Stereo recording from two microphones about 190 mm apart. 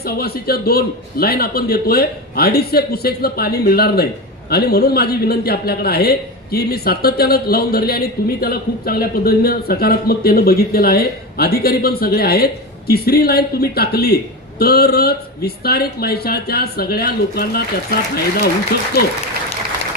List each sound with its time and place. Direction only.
0.0 s a man's voice: 55° left (ahead or behind)